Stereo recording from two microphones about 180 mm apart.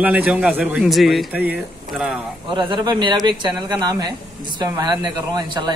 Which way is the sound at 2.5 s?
25° right (ahead or behind).